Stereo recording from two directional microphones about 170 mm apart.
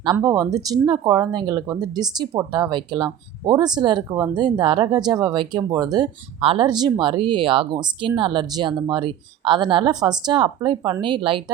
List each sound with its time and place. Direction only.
0.2 s speech: 20° right (ahead or behind)